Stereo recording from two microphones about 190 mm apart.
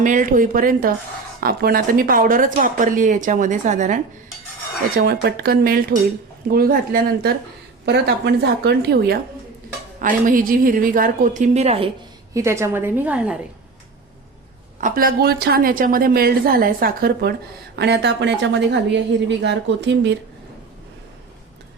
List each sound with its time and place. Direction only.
0.0 s a woman's voice: 45° right (ahead or behind)
4.9 s a woman's voice: 55° right (ahead or behind)
7.9 s a woman's voice: 60° right (ahead or behind)
10.0 s a woman's voice: 45° right (ahead or behind)
12.3 s a woman's voice: 15° right (ahead or behind)
14.8 s a woman's voice: 45° right (ahead or behind)
17.7 s a woman's voice: 65° right (ahead or behind)